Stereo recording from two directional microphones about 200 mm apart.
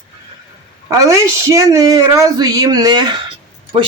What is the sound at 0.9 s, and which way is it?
Speech, 15° right (ahead or behind).